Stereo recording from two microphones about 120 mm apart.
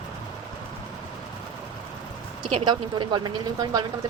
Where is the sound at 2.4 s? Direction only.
40° right (ahead or behind).